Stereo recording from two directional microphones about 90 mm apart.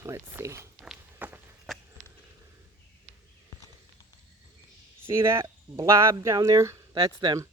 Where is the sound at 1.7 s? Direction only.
Centre (ahead or behind).